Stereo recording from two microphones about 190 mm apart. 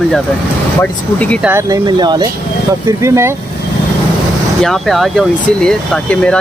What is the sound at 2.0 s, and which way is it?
Speech, 20° right (ahead or behind).